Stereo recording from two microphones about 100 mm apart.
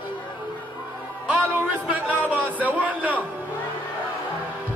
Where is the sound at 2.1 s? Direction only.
15° right (ahead or behind).